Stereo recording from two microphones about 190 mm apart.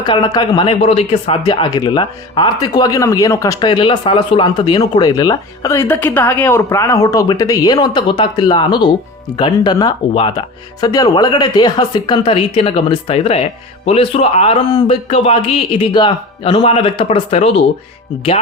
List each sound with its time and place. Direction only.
0.0 s speech: 25° left (ahead or behind)